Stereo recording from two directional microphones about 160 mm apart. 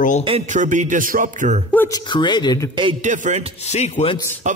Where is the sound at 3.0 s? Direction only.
50° right (ahead or behind).